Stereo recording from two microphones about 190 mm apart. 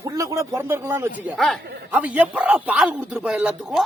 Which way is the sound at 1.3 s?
Centre (ahead or behind).